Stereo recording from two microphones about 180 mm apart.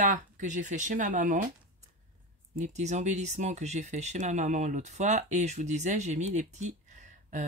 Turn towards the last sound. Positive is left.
turn(degrees=-40)  # may be behind; listen again after turning